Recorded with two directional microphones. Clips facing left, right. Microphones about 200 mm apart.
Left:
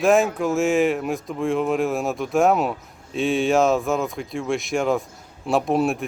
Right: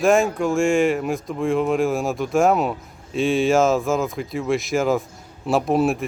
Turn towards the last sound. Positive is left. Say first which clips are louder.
# right 1 dB
turn(degrees=0)  # may be behind; listen again after turning